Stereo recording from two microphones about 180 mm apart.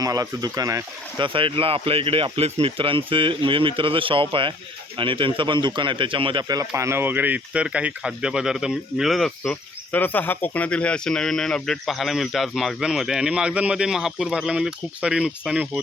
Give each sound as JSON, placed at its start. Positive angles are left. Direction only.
{"t": 0.0, "sound": "speech", "side_deg": -20}